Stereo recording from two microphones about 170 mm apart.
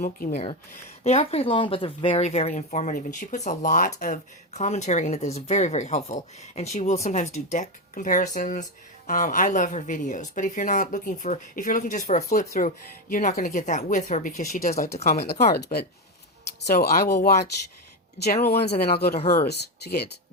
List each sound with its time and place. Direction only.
0.3 s a woman's voice: 40° left (ahead or behind); by 14.8 s 55° left (ahead or behind)
14.9 s speech: 40° left (ahead or behind)
15.2 s speech: 65° left (ahead or behind)